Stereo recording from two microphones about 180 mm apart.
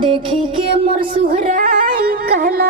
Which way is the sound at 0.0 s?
30° right (ahead or behind).